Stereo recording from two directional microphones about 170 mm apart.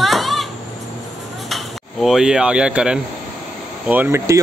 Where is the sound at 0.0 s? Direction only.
Centre (ahead or behind).